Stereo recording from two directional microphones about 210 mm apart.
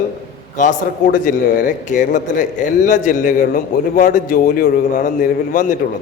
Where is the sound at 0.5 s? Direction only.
40° left (ahead or behind).